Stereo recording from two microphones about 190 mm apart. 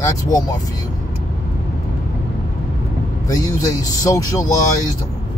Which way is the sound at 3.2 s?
20° left (ahead or behind).